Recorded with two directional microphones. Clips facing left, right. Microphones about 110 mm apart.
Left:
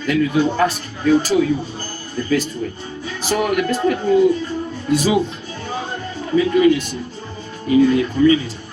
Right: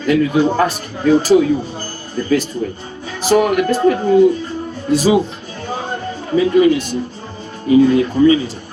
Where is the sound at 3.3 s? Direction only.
35° right (ahead or behind).